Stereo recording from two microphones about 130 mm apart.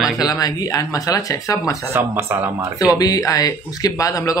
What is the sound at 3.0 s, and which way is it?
Speech, 25° left (ahead or behind).